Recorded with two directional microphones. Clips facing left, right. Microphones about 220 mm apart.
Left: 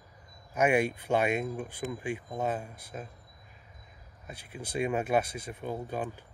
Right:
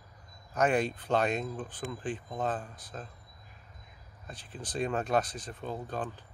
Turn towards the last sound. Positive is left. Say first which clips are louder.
# left 2 dB
turn(degrees=10)  # may be behind; listen again after turning